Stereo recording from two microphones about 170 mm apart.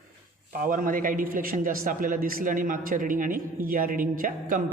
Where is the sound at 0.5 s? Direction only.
55° right (ahead or behind).